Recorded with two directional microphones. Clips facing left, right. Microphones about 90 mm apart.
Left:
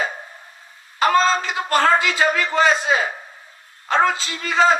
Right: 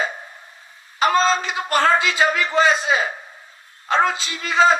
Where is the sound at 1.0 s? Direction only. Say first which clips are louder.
Left 1 dB; 20° right (ahead or behind).